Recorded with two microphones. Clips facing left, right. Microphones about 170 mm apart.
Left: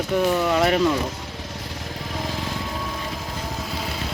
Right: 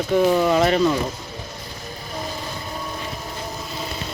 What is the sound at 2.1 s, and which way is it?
Vehicle, 90° left.